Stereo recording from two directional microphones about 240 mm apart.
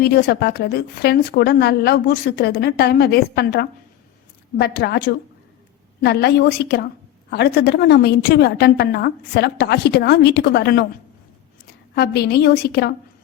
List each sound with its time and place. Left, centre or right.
0.0 s a woman's voice: left
11.9 s a woman's voice: left